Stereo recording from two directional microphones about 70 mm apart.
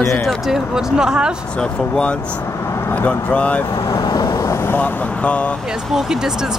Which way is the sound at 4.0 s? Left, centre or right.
Left.